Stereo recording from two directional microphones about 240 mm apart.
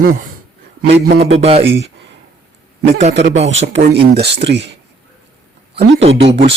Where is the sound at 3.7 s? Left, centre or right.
Right.